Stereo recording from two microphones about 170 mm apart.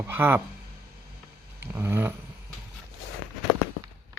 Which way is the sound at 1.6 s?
15° right (ahead or behind).